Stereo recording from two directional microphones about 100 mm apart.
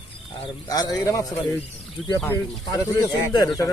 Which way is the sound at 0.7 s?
40° left (ahead or behind).